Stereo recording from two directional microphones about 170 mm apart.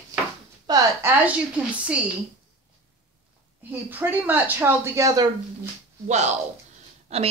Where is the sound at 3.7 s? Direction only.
10° right (ahead or behind).